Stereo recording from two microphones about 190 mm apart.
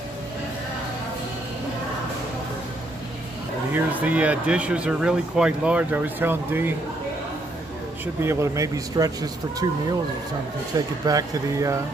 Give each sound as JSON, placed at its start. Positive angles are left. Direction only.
{"t": 3.7, "sound": "speech", "side_deg": -10}
{"t": 8.0, "sound": "speech", "side_deg": -15}
{"t": 11.1, "sound": "speech", "side_deg": -15}